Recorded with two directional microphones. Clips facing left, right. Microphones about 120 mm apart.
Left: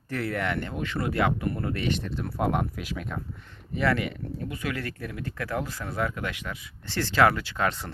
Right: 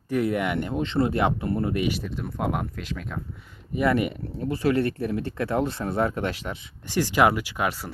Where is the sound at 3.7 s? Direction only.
20° right (ahead or behind).